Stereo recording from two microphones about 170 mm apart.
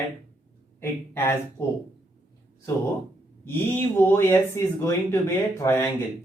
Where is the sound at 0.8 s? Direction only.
15° left (ahead or behind).